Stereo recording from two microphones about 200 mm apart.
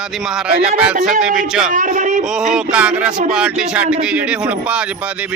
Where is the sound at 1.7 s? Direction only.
40° right (ahead or behind).